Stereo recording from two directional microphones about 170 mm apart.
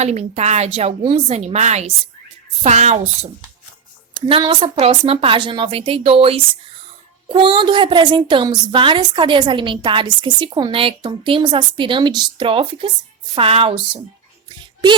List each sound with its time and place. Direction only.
0.0 s a woman's voice: 40° right (ahead or behind)
4.1 s a woman's voice: 30° right (ahead or behind)